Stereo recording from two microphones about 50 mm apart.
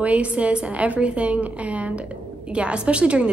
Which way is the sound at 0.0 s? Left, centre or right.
Right.